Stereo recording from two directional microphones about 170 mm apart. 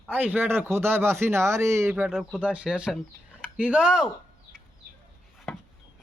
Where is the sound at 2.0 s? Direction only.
Centre (ahead or behind).